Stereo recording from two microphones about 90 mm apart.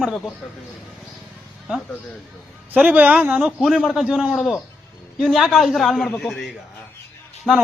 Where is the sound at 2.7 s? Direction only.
15° right (ahead or behind).